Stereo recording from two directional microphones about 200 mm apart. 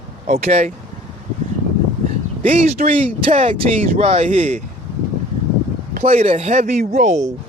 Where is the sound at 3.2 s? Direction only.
30° right (ahead or behind).